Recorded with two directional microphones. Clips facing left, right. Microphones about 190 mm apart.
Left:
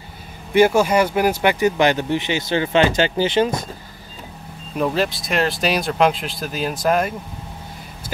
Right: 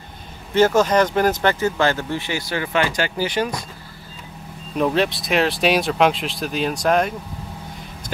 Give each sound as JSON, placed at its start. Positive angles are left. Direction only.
{"t": 0.5, "sound": "speech", "side_deg": 10}
{"t": 4.7, "sound": "speech", "side_deg": 0}